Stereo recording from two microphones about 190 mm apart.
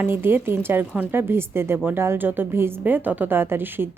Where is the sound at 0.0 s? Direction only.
10° right (ahead or behind).